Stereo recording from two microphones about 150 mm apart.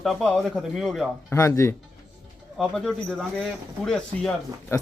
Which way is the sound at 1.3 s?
20° left (ahead or behind).